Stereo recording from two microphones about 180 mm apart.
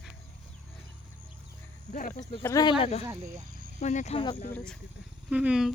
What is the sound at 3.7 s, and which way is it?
Speech, 40° left (ahead or behind).